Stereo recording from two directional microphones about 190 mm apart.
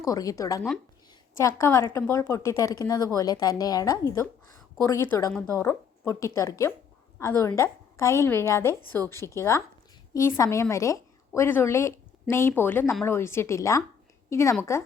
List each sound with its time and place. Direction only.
0.0 s a woman's voice: 20° left (ahead or behind)